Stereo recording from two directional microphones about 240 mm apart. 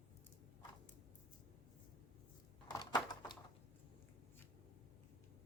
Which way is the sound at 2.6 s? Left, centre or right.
Centre.